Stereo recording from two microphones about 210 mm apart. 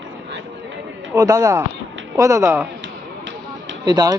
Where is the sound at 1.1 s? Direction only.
15° right (ahead or behind).